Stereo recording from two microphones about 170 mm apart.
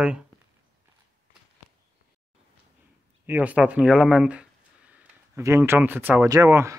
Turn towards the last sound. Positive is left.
turn(degrees=-15)  # may be behind; listen again after turning